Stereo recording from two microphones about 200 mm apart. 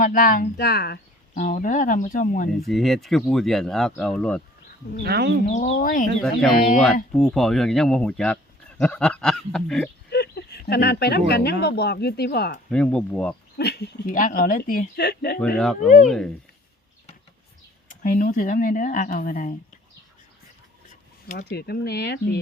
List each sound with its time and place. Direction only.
0.0 s speech: 40° left (ahead or behind)
2.5 s speech: centre (ahead or behind)
5.0 s speech: 55° right (ahead or behind)
5.5 s speech: 35° left (ahead or behind)
7.2 s speech: centre (ahead or behind)
10.1 s speech: 55° left (ahead or behind)
12.7 s speech: 5° left (ahead or behind)
13.6 s speech: 55° left (ahead or behind)
15.5 s speech: centre (ahead or behind)
17.8 s speech: 40° left (ahead or behind)
21.3 s speech: 50° left (ahead or behind)